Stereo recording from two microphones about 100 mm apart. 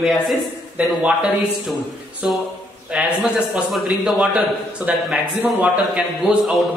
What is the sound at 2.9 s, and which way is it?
Speech, 10° right (ahead or behind).